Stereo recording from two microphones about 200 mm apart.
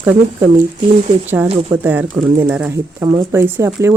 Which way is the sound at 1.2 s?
10° right (ahead or behind).